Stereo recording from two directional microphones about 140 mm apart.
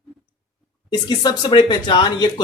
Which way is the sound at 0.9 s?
30° left (ahead or behind).